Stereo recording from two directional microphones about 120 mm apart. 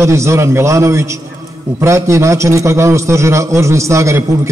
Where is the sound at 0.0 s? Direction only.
25° right (ahead or behind).